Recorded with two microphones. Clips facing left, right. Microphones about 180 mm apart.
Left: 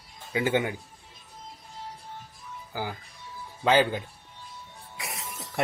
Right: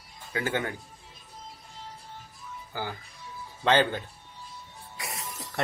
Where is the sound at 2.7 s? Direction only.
10° left (ahead or behind).